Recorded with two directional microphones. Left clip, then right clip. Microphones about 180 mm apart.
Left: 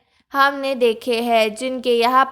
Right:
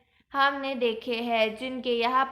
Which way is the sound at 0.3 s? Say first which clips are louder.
Left 8 dB; 50° left (ahead or behind).